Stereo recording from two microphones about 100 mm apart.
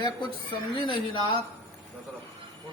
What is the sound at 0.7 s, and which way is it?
Speech, 55° left (ahead or behind).